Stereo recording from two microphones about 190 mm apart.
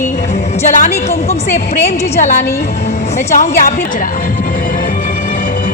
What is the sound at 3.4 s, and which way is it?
Speech, 45° left (ahead or behind).